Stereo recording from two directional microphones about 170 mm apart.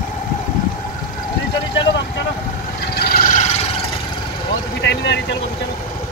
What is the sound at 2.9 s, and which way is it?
Frog, 65° left (ahead or behind).